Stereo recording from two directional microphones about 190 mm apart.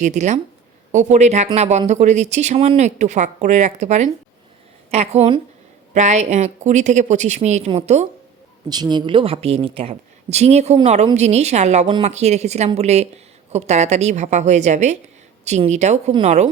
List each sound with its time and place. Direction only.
0.0 s speech: 35° right (ahead or behind)
8.7 s speech: 20° right (ahead or behind)